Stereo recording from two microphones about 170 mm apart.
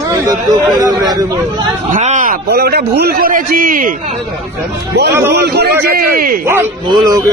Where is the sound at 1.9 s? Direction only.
45° right (ahead or behind).